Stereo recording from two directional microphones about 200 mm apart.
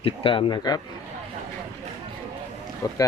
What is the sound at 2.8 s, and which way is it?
Speech, 20° left (ahead or behind).